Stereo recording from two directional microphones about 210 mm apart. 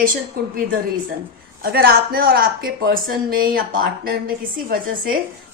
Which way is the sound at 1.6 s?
50° right (ahead or behind).